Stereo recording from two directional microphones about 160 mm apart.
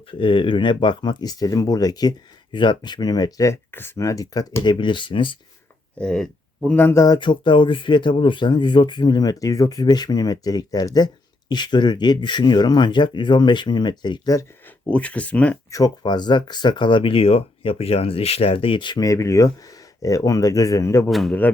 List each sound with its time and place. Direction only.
0.1 s speech: 35° left (ahead or behind)
6.0 s speech: 5° left (ahead or behind); by 14.4 s 25° left (ahead or behind)
14.8 s speech: 10° left (ahead or behind)
15.7 s speech: 25° left (ahead or behind)
21.1 s a man's voice: centre (ahead or behind)